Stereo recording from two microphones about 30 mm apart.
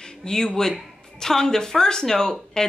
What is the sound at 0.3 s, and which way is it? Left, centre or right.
Speech, left.